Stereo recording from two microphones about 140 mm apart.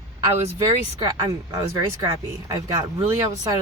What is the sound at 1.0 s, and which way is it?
Speech, 25° right (ahead or behind).